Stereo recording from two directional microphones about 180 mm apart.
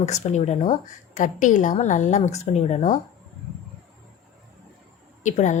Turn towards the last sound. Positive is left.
turn(degrees=40)  # may be behind; listen again after turning